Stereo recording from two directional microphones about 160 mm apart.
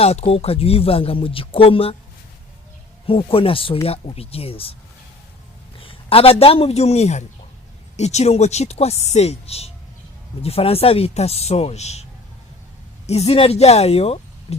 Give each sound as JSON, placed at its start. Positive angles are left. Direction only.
{"t": 0.0, "sound": "speech", "side_deg": 40}
{"t": 3.1, "sound": "speech", "side_deg": 35}
{"t": 5.8, "sound": "a man's voice", "side_deg": 35}
{"t": 13.1, "sound": "speech", "side_deg": 40}